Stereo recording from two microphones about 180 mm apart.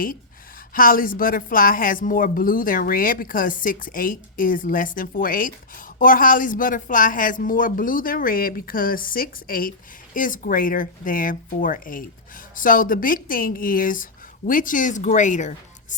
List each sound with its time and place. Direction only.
0.7 s a woman's voice: 50° left (ahead or behind)